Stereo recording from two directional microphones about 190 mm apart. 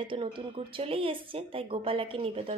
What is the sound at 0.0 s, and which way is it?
A woman's voice, 25° right (ahead or behind).